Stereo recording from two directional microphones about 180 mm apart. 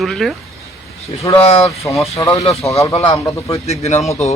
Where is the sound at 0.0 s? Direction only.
Centre (ahead or behind).